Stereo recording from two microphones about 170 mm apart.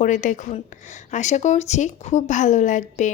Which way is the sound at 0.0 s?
45° left (ahead or behind).